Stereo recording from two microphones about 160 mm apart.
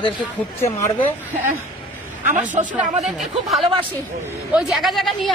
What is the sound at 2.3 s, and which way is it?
Speech, 55° right (ahead or behind).